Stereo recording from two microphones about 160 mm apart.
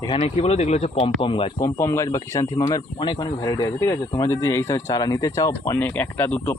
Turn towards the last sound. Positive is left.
turn(degrees=10)  # may be behind; listen again after turning